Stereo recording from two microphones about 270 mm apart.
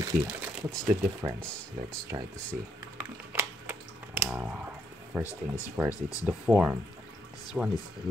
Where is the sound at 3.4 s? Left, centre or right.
Centre.